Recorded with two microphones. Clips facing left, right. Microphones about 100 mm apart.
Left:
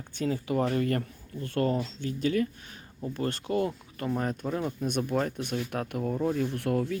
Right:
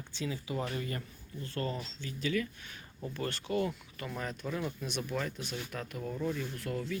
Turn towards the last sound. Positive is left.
turn(degrees=60)  # may be behind; listen again after turning